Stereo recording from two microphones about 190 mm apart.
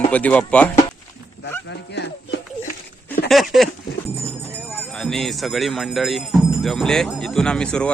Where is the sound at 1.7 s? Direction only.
65° left (ahead or behind).